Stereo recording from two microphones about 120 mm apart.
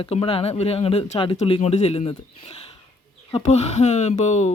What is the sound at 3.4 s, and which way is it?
Speech, 70° left (ahead or behind).